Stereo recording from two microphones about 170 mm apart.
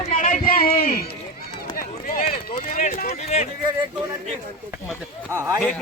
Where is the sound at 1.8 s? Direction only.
55° left (ahead or behind).